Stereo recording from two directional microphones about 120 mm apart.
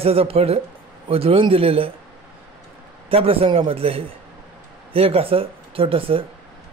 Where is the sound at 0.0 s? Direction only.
55° right (ahead or behind).